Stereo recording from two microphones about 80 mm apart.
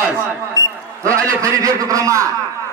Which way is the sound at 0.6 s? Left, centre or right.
Left.